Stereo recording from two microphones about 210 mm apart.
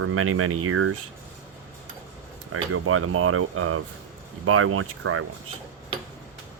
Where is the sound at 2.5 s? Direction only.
90° right.